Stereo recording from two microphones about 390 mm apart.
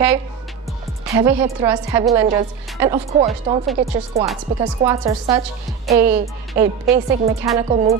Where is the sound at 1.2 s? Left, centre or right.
Centre.